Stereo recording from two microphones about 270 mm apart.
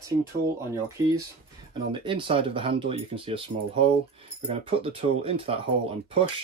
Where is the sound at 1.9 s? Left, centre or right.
Centre.